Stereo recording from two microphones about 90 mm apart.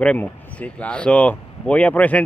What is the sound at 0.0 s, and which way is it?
Speech, 15° left (ahead or behind).